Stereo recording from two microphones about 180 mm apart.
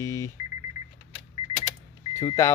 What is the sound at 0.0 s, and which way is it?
Alarm clock, 15° left (ahead or behind).